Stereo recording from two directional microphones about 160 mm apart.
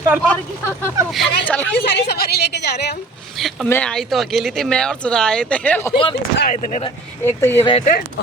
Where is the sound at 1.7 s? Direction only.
90° left.